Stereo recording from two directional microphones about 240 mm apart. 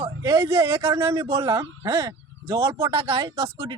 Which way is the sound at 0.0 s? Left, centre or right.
Centre.